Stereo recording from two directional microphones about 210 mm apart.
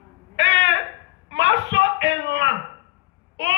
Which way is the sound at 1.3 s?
55° right (ahead or behind).